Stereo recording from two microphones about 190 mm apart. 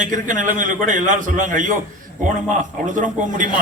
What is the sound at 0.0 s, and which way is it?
A man's voice, 45° right (ahead or behind).